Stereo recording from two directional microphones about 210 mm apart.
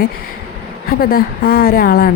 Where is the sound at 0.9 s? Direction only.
45° left (ahead or behind).